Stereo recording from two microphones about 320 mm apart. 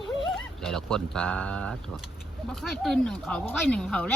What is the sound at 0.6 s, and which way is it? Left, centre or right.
Speech, centre.